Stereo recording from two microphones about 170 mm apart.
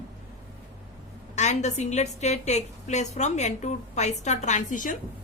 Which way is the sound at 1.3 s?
45° left (ahead or behind).